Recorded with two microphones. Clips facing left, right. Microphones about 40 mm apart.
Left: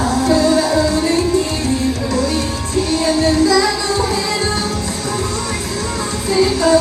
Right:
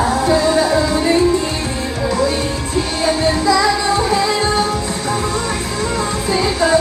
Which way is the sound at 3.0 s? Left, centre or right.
Right.